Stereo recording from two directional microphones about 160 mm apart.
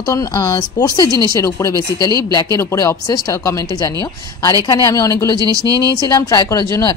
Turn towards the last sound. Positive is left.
turn(degrees=25)  # may be behind; listen again after turning